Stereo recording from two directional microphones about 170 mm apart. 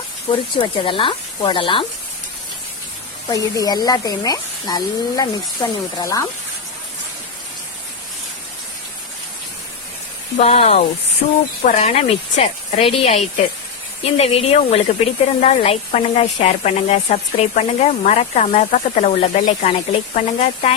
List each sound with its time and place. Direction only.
0.3 s speech: 30° left (ahead or behind)
3.2 s speech: 20° left (ahead or behind)
10.3 s a woman's voice: 35° left (ahead or behind)